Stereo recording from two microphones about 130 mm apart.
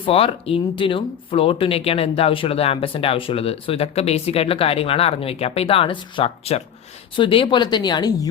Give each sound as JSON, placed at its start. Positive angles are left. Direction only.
{"t": 0.0, "sound": "speech", "side_deg": 45}
{"t": 7.2, "sound": "speech", "side_deg": 40}